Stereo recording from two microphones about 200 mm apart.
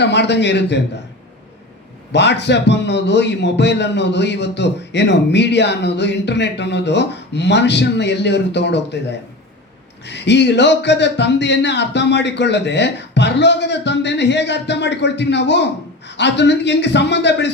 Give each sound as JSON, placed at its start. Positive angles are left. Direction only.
{"t": 0.0, "sound": "speech", "side_deg": 60}
{"t": 2.1, "sound": "speech", "side_deg": 60}